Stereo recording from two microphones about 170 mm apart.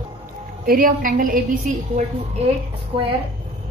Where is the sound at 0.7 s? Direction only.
55° right (ahead or behind).